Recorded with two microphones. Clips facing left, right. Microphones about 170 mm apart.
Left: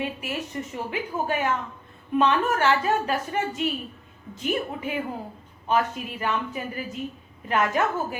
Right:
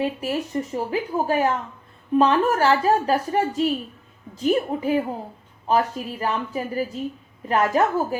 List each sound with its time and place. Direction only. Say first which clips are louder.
0.0 s speech: right 6 dB; 35° right (ahead or behind)